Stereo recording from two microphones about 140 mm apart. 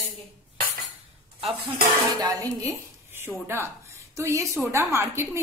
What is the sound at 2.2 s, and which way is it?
A woman's voice, 25° right (ahead or behind).